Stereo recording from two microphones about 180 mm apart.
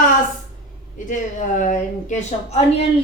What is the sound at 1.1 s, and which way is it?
A woman's voice, 45° left (ahead or behind).